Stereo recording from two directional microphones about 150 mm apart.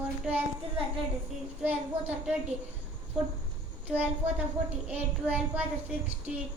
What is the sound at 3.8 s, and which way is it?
A child's voice, 10° right (ahead or behind).